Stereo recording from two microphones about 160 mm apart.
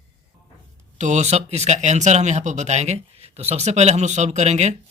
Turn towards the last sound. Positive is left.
turn(degrees=-45)  # may be behind; listen again after turning